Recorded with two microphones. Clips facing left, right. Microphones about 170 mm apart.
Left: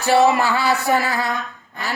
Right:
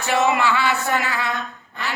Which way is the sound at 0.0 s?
35° left (ahead or behind).